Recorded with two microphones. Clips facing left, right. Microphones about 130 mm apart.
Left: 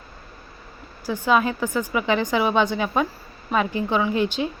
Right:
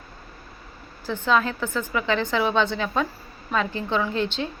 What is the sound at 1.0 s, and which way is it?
A woman's voice, 10° left (ahead or behind).